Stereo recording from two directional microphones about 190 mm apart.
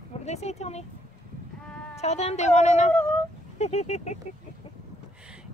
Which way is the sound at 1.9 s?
35° left (ahead or behind).